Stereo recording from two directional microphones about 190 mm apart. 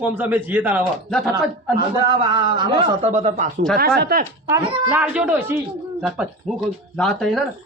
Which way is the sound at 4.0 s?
55° right (ahead or behind).